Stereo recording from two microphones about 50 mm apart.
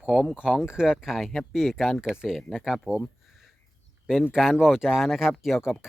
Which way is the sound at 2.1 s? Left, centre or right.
Centre.